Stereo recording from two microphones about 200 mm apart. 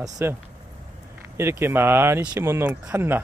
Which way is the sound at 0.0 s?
10° right (ahead or behind).